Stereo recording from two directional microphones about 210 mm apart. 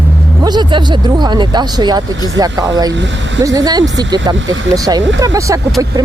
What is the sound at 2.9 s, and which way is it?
Speech, 60° right (ahead or behind).